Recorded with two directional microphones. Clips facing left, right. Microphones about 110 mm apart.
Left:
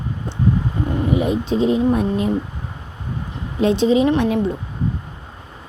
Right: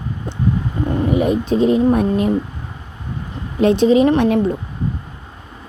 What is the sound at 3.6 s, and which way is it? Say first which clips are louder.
Speech: right 3 dB; 55° right (ahead or behind).